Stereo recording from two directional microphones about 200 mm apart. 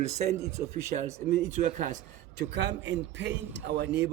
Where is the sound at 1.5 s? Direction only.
40° right (ahead or behind).